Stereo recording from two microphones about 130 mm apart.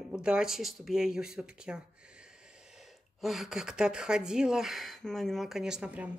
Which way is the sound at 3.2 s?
Centre (ahead or behind).